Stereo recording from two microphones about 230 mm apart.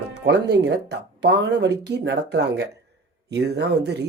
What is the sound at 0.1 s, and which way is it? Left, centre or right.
Speech, right.